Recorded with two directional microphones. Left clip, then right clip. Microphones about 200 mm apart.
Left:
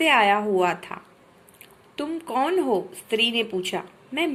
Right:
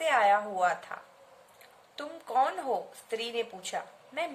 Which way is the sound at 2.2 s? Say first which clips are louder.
Left 4 dB; 20° left (ahead or behind).